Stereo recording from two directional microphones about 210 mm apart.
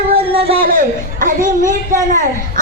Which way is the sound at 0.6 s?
40° right (ahead or behind).